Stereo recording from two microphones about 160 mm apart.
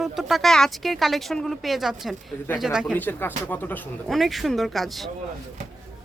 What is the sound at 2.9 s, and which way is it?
Speech, 10° left (ahead or behind).